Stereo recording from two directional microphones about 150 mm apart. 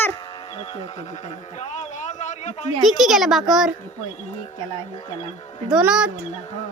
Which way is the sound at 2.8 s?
Centre (ahead or behind).